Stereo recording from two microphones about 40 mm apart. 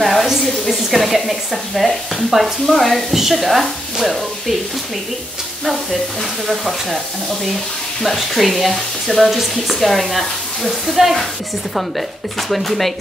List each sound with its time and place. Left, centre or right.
0.0 s a woman's voice: centre
6.4 s speech: centre
12.4 s speech: centre